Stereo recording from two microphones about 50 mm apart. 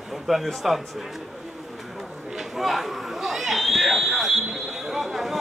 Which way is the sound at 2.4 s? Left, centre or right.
Centre.